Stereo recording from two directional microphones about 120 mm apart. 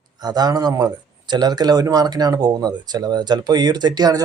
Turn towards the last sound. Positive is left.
turn(degrees=-35)  # may be behind; listen again after turning